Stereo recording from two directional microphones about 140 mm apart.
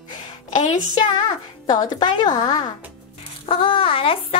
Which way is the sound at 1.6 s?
30° left (ahead or behind).